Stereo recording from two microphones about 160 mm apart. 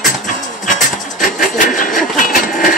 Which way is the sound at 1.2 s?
55° left (ahead or behind).